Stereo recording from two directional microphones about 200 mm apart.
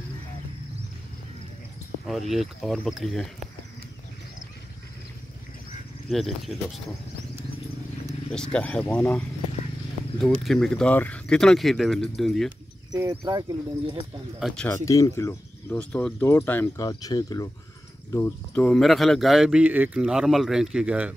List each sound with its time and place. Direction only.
2.0 s speech: centre (ahead or behind)
6.0 s speech: centre (ahead or behind)
8.3 s speech: 5° left (ahead or behind)
13.2 s speech: 20° right (ahead or behind)
14.4 s speech: 5° left (ahead or behind)
14.9 s speech: 15° left (ahead or behind); by 21.1 s 5° right (ahead or behind)